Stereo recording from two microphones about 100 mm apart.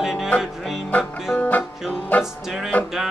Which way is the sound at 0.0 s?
5° right (ahead or behind).